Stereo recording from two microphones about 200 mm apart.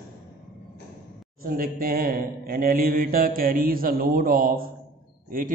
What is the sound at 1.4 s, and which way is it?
A man's voice, 45° right (ahead or behind).